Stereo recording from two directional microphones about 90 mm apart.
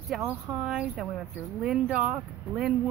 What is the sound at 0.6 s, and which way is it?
Speech, 5° right (ahead or behind).